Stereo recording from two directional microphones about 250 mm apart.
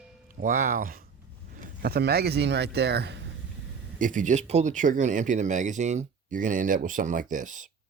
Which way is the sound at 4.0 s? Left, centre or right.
Right.